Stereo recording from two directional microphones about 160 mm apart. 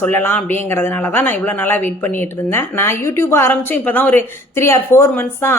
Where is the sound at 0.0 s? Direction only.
15° left (ahead or behind).